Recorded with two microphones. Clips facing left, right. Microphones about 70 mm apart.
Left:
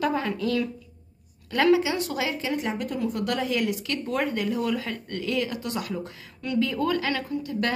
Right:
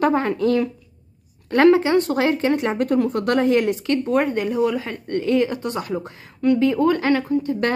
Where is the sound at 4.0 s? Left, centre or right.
Right.